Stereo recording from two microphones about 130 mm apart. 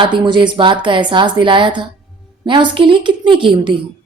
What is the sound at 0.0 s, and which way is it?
A woman's voice, 35° right (ahead or behind).